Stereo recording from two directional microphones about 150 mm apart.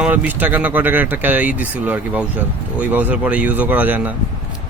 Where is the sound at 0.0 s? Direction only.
10° right (ahead or behind).